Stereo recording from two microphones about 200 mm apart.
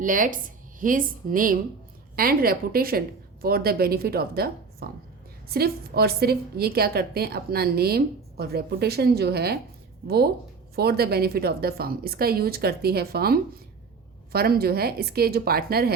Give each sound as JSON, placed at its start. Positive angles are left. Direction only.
{"t": 0.0, "sound": "a woman's voice", "side_deg": -40}
{"t": 10.8, "sound": "a woman's voice", "side_deg": -50}